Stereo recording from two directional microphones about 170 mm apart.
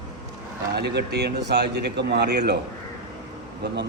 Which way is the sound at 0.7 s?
80° right.